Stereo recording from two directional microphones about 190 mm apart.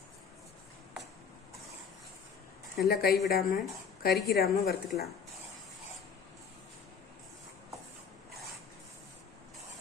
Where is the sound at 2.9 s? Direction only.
55° left (ahead or behind).